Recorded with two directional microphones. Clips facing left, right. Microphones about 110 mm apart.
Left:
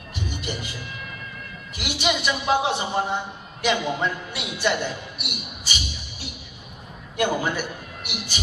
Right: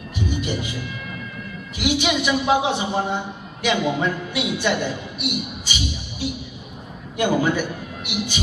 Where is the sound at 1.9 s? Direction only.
15° right (ahead or behind).